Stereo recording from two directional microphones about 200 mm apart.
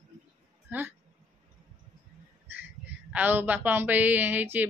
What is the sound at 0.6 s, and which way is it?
Speech, 10° right (ahead or behind).